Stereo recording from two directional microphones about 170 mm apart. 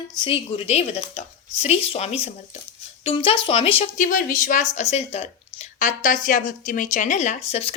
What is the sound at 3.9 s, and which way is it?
Speech, 50° left (ahead or behind).